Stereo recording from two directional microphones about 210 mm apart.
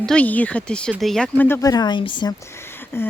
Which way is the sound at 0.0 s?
5° left (ahead or behind).